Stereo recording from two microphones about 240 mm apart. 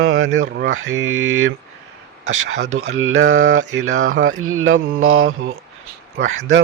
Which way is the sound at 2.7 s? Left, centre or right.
Right.